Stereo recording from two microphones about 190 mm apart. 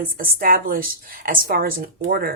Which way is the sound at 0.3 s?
45° right (ahead or behind).